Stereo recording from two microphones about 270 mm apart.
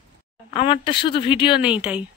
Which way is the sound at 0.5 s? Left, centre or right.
Centre.